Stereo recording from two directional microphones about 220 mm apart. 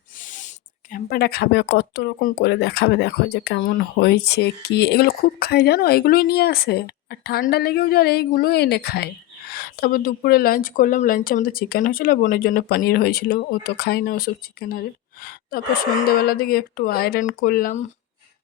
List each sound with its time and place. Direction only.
0.2 s speech: 35° left (ahead or behind)